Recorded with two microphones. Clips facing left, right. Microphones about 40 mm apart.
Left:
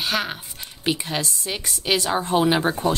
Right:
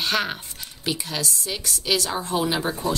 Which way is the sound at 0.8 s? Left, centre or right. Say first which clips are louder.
Left 3 dB; left.